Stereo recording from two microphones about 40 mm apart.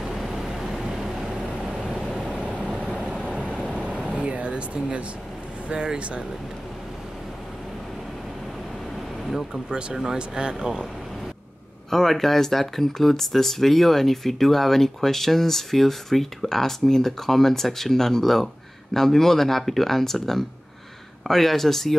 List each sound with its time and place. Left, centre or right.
0.0 s vehicle: centre
0.3 s vehicle: centre
2.1 s vehicle: right
4.0 s vehicle: centre
4.3 s air conditioning: right
5.9 s speech: right
9.5 s speech: right
11.9 s speech: centre